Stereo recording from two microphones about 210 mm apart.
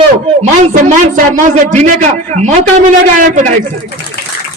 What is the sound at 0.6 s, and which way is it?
A man's voice, 35° right (ahead or behind).